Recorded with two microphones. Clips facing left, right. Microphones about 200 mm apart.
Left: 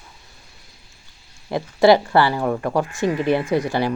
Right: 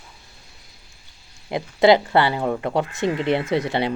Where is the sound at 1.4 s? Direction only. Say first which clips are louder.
Left 1 dB; 20° right (ahead or behind).